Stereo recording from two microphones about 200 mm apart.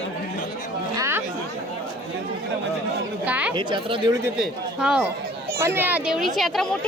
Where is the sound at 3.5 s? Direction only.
25° right (ahead or behind).